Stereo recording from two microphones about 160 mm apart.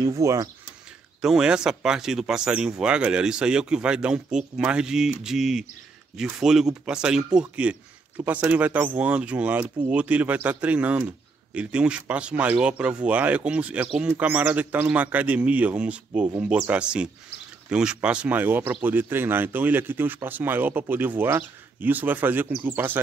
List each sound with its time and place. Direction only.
0.0 s speech: 20° right (ahead or behind)
1.2 s speech: 5° right (ahead or behind)